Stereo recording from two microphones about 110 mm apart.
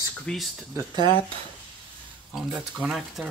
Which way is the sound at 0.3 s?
10° left (ahead or behind).